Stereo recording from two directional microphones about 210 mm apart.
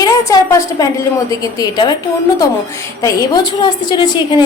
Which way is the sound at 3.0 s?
15° left (ahead or behind).